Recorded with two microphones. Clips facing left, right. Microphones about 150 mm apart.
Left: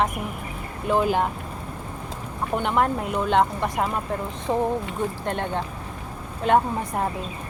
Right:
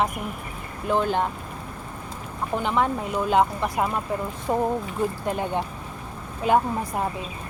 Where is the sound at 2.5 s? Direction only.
Centre (ahead or behind).